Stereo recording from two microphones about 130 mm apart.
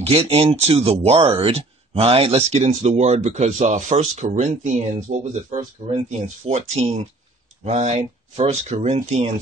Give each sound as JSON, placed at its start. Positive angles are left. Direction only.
{"t": 0.0, "sound": "speech", "side_deg": -50}